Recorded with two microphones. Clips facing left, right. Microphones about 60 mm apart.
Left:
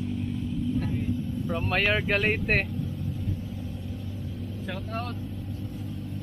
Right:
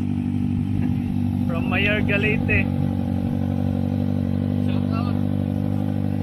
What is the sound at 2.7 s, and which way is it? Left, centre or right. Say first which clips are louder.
Vehicle: right 10 dB; right.